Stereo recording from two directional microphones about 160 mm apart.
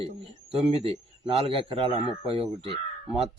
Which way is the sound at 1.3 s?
35° right (ahead or behind).